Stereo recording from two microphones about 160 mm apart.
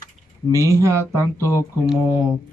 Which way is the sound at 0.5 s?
20° right (ahead or behind).